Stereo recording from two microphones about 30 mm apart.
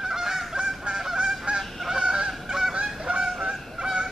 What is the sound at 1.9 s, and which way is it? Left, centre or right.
Honk, right.